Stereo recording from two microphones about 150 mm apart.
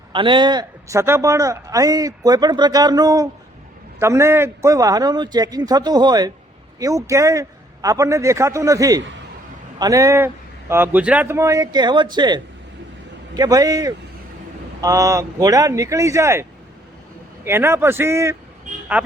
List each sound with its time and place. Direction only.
0.1 s a man's voice: 35° right (ahead or behind); by 19.1 s 10° right (ahead or behind)